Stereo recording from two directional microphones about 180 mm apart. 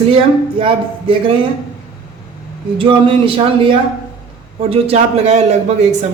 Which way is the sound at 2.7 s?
30° right (ahead or behind).